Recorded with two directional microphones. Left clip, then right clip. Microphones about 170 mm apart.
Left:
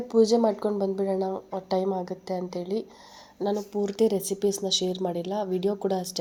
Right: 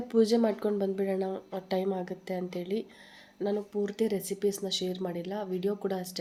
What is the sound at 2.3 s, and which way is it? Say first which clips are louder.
Speech: left 3 dB; 20° right (ahead or behind).